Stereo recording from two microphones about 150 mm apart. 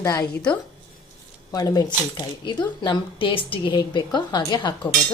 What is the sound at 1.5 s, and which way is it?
Speech, 25° left (ahead or behind).